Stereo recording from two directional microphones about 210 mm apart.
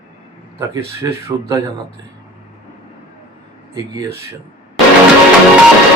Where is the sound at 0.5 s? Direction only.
15° right (ahead or behind).